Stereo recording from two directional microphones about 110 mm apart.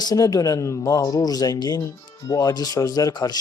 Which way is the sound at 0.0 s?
35° left (ahead or behind).